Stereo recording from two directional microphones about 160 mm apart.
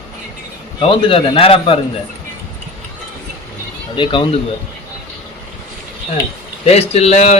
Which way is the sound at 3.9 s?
30° left (ahead or behind).